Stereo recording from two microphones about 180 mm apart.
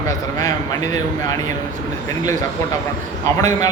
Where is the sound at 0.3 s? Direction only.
20° left (ahead or behind).